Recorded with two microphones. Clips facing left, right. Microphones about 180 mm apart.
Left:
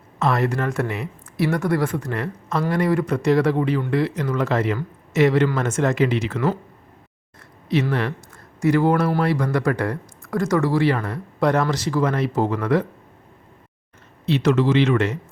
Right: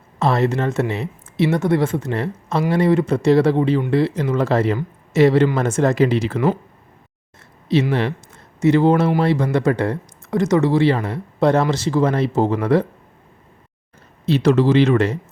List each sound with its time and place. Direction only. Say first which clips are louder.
0.2 s speech: right 3 dB; 30° right (ahead or behind)
7.7 s speech: right 3 dB; 25° right (ahead or behind)
14.3 s speech: right 3 dB; 35° right (ahead or behind)